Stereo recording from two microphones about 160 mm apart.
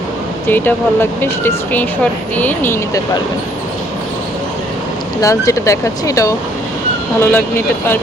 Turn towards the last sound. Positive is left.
turn(degrees=10)  # may be behind; listen again after turning